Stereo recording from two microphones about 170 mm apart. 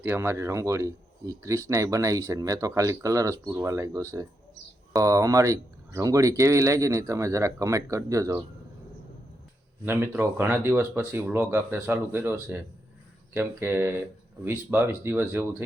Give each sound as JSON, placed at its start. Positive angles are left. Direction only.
{"t": 0.0, "sound": "speech", "side_deg": -15}
{"t": 9.8, "sound": "speech", "side_deg": -15}